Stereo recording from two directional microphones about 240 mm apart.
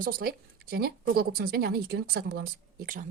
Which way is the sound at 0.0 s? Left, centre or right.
Right.